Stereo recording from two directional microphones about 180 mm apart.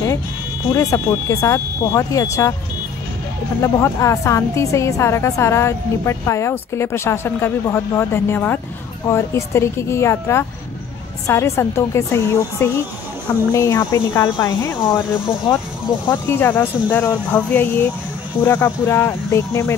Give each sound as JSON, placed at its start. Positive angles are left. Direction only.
{"t": 0.7, "sound": "a woman's voice", "side_deg": 20}
{"t": 3.6, "sound": "a woman's voice", "side_deg": 15}
{"t": 16.1, "sound": "a woman's voice", "side_deg": 10}